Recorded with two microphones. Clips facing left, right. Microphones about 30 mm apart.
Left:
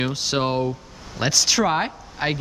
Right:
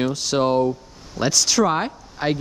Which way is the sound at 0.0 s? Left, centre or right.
Centre.